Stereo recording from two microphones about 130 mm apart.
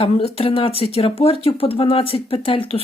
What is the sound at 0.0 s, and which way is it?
Speech, 50° left (ahead or behind).